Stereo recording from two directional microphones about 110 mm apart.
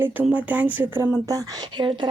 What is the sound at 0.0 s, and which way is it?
Speech, 15° right (ahead or behind).